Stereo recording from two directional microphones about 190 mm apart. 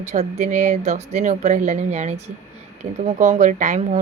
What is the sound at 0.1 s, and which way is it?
Speech, 35° right (ahead or behind).